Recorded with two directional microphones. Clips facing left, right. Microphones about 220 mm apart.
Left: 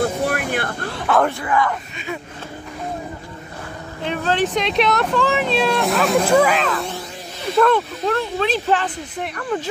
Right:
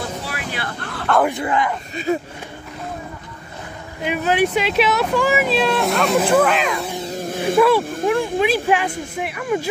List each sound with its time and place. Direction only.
0.2 s vehicle: 50° left (ahead or behind)
1.1 s speech: 5° left (ahead or behind)
1.4 s speech: 25° right (ahead or behind)
2.1 s speech: 40° right (ahead or behind)
4.0 s speech: 10° right (ahead or behind)
7.2 s snake: 50° right (ahead or behind)
7.5 s speech: 10° right (ahead or behind)